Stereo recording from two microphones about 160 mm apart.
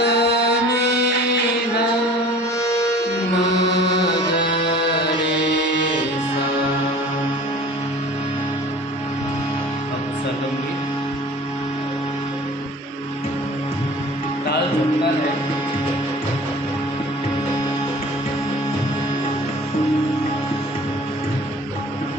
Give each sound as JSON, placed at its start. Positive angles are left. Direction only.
{"t": 0.0, "sound": "music", "side_deg": 90}
{"t": 2.6, "sound": "music", "side_deg": 20}
{"t": 3.7, "sound": "music", "side_deg": 90}
{"t": 4.1, "sound": "music", "side_deg": 25}